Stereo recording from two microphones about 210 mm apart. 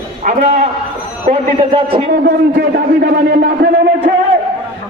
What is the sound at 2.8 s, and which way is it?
A man's voice, 50° right (ahead or behind).